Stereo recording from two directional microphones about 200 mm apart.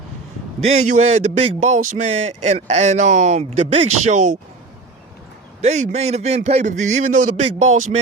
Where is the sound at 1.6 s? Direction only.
35° right (ahead or behind).